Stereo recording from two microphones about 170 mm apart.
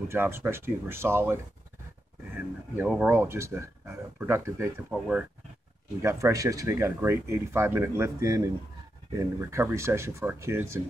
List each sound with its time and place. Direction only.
0.1 s speech: 15° right (ahead or behind)
2.7 s speech: 10° right (ahead or behind)
6.0 s speech: 15° right (ahead or behind)